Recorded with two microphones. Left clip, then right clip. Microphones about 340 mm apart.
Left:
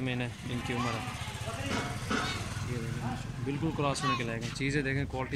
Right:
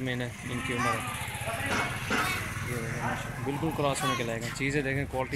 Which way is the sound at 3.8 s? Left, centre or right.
Centre.